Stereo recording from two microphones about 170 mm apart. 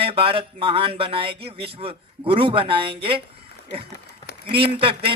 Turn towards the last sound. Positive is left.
turn(degrees=-35)  # may be behind; listen again after turning